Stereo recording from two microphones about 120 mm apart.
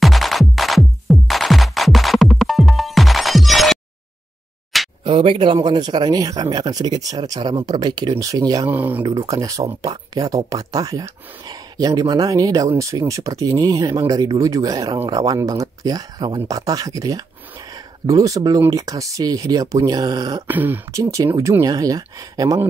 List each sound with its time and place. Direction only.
0.0 s music: centre (ahead or behind)
5.0 s speech: 45° right (ahead or behind); by 8.6 s 30° right (ahead or behind)
8.6 s speech: 15° right (ahead or behind)
9.0 s speech: 35° right (ahead or behind)
20.4 s speech: 15° right (ahead or behind)
20.9 s speech: 25° right (ahead or behind)